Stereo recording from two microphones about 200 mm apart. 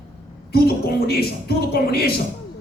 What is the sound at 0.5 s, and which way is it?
Speech, 50° left (ahead or behind).